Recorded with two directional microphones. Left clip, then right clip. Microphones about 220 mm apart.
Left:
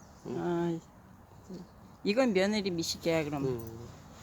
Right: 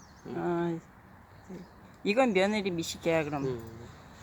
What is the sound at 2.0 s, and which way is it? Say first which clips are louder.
Speech: right 2 dB; 10° left (ahead or behind).